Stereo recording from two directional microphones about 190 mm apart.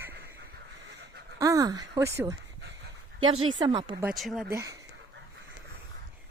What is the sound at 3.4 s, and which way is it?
Speech, 25° right (ahead or behind).